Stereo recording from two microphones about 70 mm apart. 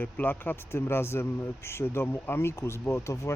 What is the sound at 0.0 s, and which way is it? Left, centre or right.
Speech, left.